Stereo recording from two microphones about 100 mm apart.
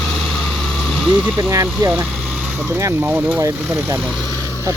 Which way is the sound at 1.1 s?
10° right (ahead or behind).